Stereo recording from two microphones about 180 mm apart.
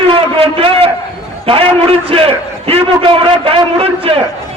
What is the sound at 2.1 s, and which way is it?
A man's voice, 30° right (ahead or behind).